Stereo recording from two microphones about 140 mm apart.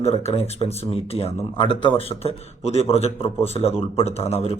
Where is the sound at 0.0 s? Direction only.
50° left (ahead or behind).